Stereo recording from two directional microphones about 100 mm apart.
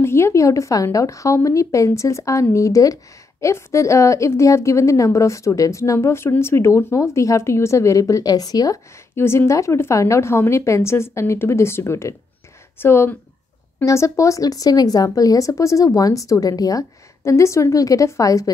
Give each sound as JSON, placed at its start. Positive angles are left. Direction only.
{"t": 0.0, "sound": "a woman's voice", "side_deg": 25}
{"t": 9.1, "sound": "a woman's voice", "side_deg": 25}